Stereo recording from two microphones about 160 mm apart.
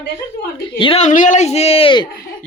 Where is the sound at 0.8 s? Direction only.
35° left (ahead or behind).